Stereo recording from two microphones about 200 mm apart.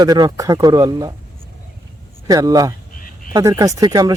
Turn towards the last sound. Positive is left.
turn(degrees=-20)  # may be behind; listen again after turning